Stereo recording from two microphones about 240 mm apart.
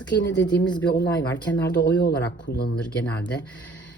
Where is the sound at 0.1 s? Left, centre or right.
Left.